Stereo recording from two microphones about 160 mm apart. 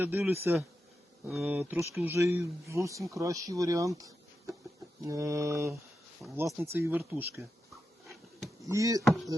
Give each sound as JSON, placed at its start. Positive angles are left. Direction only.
{"t": 0.0, "sound": "speech", "side_deg": -15}
{"t": 5.0, "sound": "mantra", "side_deg": -20}
{"t": 6.2, "sound": "speech", "side_deg": -5}
{"t": 8.6, "sound": "mantra", "side_deg": -20}
{"t": 9.0, "sound": "speech", "side_deg": 0}